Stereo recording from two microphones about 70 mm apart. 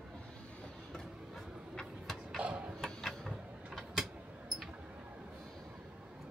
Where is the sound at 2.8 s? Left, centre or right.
Centre.